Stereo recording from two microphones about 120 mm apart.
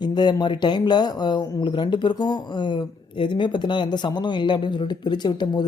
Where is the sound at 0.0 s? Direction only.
35° left (ahead or behind).